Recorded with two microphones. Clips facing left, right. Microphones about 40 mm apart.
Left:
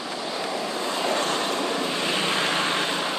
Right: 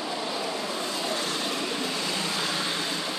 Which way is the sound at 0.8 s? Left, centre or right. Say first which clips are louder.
Left 5 dB; left.